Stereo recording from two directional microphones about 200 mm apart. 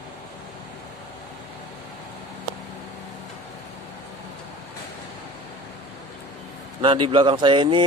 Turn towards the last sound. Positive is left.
turn(degrees=-25)  # may be behind; listen again after turning